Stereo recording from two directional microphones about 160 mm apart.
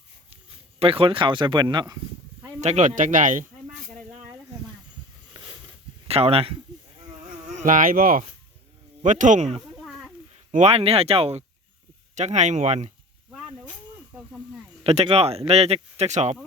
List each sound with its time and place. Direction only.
0.8 s speech: 35° right (ahead or behind)
2.6 s speech: 45° right (ahead or behind)
6.1 s speech: 40° right (ahead or behind)
7.4 s speech: 50° right (ahead or behind)
9.0 s speech: 50° right (ahead or behind)
9.7 s a sound: centre (ahead or behind)
10.5 s speech: 45° right (ahead or behind)
13.3 s snake: centre (ahead or behind)
14.8 s speech: 40° right (ahead or behind)